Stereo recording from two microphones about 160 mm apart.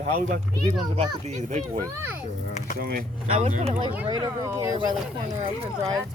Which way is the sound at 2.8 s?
65° right (ahead or behind).